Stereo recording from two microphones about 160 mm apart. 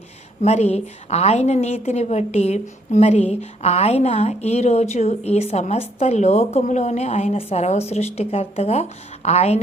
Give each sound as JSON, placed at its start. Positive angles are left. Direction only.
{"t": 0.4, "sound": "a woman's voice", "side_deg": 40}